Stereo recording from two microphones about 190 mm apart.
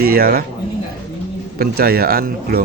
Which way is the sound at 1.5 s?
55° right (ahead or behind).